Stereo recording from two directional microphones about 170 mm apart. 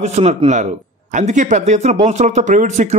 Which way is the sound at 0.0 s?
40° right (ahead or behind).